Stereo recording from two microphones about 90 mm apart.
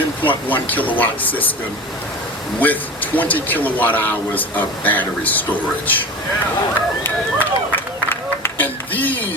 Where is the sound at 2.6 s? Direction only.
20° left (ahead or behind).